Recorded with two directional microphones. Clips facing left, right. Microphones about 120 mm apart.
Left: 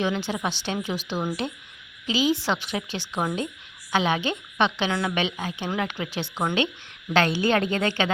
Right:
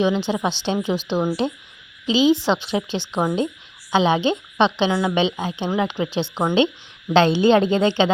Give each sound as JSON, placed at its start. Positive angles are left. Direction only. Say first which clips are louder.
{"t": 0.0, "sound": "speech", "louder": "right 6 dB", "side_deg": -20}
{"t": 4.9, "sound": "a woman's voice", "louder": "right 5 dB", "side_deg": -10}
{"t": 5.1, "sound": "speech", "louder": "right 6 dB", "side_deg": -25}